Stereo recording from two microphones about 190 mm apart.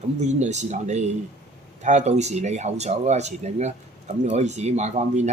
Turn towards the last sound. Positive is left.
turn(degrees=-35)  # may be behind; listen again after turning